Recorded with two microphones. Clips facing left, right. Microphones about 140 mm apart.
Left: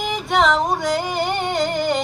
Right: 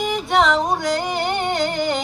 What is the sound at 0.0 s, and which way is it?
Music, centre (ahead or behind).